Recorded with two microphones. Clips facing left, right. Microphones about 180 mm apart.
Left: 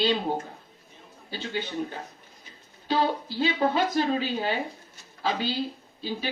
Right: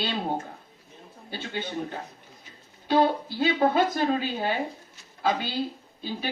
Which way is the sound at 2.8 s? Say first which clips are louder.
Right 3 dB; 50° right (ahead or behind).